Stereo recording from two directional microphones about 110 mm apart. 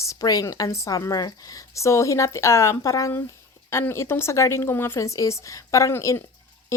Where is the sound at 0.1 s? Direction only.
30° left (ahead or behind).